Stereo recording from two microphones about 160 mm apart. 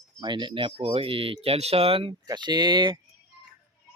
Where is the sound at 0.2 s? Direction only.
30° right (ahead or behind).